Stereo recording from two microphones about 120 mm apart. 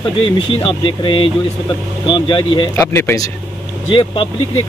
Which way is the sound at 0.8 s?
45° left (ahead or behind).